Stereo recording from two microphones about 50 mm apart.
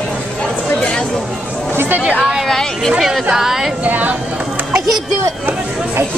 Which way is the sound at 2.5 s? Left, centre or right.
Centre.